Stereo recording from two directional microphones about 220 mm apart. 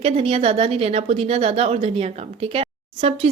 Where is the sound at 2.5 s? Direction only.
25° right (ahead or behind).